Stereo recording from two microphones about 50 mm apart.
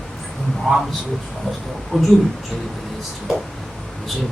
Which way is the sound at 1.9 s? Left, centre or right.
Centre.